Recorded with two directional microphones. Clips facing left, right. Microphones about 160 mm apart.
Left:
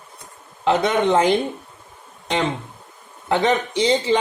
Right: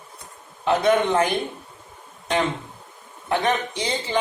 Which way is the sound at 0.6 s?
90° left.